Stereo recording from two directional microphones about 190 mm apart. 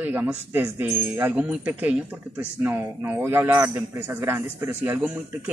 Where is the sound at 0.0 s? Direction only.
10° right (ahead or behind).